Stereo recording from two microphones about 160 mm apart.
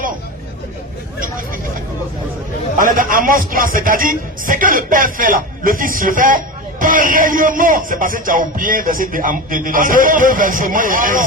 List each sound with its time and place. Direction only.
2.7 s speech: 60° right (ahead or behind)